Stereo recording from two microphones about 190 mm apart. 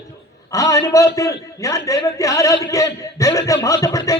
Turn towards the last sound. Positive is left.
turn(degrees=15)  # may be behind; listen again after turning